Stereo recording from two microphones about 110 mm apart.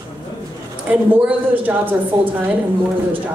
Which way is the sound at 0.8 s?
15° right (ahead or behind).